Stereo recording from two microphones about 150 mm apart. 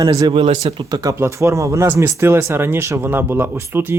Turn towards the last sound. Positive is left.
turn(degrees=-15)  # may be behind; listen again after turning